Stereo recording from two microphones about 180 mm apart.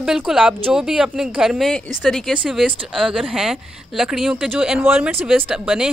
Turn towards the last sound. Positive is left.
turn(degrees=-5)  # may be behind; listen again after turning